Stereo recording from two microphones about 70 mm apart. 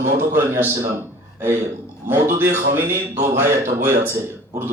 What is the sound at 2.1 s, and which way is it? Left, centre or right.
Speech, right.